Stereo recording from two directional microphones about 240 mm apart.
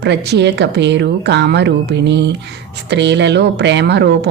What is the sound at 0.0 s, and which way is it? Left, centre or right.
Speech, right.